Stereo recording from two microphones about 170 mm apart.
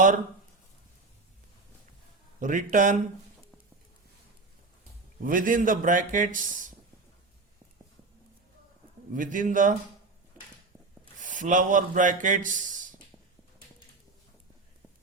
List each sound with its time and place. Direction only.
2.4 s a man's voice: 50° right (ahead or behind)
5.2 s a man's voice: 50° right (ahead or behind)
9.1 s a man's voice: 50° right (ahead or behind)
11.2 s a man's voice: 50° right (ahead or behind)